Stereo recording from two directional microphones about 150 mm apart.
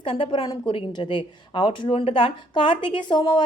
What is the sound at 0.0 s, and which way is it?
A woman's voice, 35° left (ahead or behind).